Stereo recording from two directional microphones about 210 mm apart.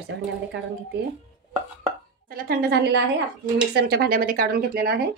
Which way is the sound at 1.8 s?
45° right (ahead or behind).